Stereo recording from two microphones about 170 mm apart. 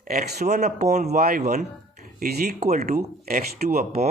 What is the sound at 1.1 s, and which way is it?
Speech, 60° right (ahead or behind).